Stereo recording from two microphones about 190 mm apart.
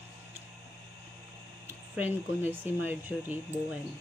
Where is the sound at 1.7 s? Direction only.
10° right (ahead or behind).